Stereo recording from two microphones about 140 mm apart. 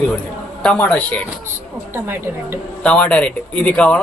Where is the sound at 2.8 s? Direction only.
10° left (ahead or behind).